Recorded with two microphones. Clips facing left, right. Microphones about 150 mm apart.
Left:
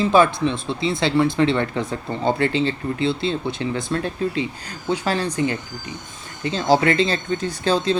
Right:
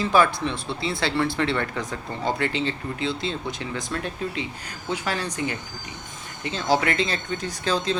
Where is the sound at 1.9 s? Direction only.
30° left (ahead or behind).